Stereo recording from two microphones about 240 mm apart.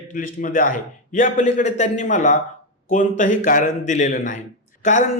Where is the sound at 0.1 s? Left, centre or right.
Left.